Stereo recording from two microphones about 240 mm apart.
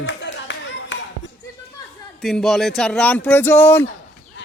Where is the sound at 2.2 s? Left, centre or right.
Centre.